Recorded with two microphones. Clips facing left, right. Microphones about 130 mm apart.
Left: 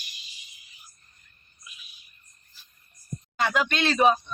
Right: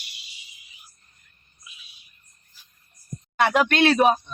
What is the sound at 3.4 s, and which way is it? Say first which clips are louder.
Speech: right 6 dB; 65° right (ahead or behind).